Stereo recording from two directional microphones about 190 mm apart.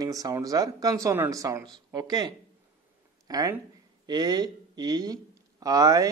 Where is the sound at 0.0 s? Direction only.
20° right (ahead or behind).